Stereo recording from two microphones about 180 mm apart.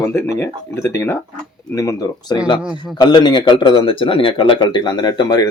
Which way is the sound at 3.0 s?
25° left (ahead or behind).